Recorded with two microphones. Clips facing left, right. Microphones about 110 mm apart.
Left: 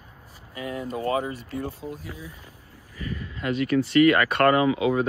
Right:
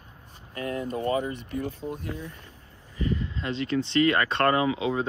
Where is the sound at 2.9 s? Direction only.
25° right (ahead or behind).